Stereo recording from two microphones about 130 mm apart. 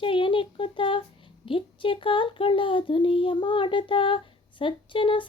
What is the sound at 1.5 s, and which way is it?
Speech, 40° left (ahead or behind).